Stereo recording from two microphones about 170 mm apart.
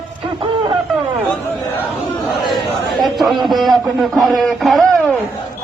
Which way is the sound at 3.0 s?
Centre (ahead or behind).